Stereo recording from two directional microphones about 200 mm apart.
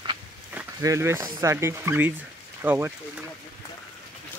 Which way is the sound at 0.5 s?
15° right (ahead or behind).